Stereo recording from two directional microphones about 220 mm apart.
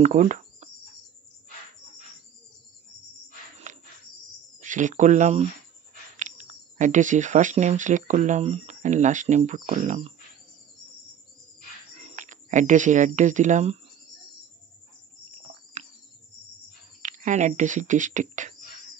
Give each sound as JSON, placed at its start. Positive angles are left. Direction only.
{"t": 0.0, "sound": "speech", "side_deg": -30}
{"t": 3.7, "sound": "a sound", "side_deg": -35}
{"t": 4.6, "sound": "speech", "side_deg": -35}
{"t": 12.2, "sound": "speech", "side_deg": -35}
{"t": 15.8, "sound": "cricket", "side_deg": -30}
{"t": 17.0, "sound": "speech", "side_deg": -35}